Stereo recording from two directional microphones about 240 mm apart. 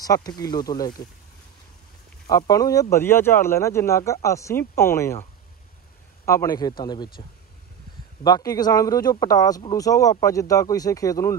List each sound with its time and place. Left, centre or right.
0.0 s speech: centre
2.2 s speech: centre
6.2 s speech: centre